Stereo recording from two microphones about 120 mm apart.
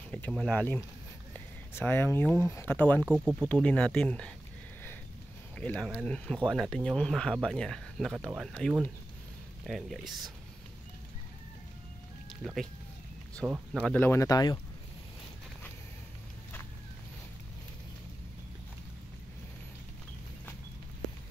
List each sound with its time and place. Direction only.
0.1 s speech: 5° left (ahead or behind)
1.3 s speech: 15° left (ahead or behind)
3.0 s speech: 10° right (ahead or behind)
3.6 s speech: 10° left (ahead or behind)
5.6 s speech: 10° left (ahead or behind)
12.4 s speech: 10° left (ahead or behind)
13.4 s speech: 5° right (ahead or behind)
13.7 s speech: 10° left (ahead or behind)
14.0 s speech: 20° left (ahead or behind)
14.3 s speech: 35° left (ahead or behind)